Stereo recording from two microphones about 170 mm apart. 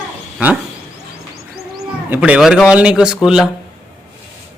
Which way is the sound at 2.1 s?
10° right (ahead or behind).